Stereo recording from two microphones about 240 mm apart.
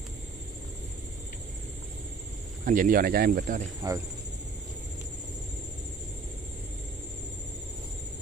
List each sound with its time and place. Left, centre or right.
2.6 s speech: right
3.8 s speech: centre